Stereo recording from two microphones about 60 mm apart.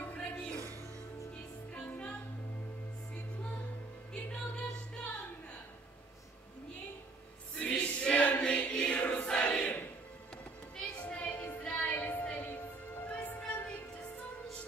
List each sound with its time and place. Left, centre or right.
0.0 s music: centre
1.7 s music: centre
4.1 s music: centre
7.5 s choir: centre
10.8 s music: centre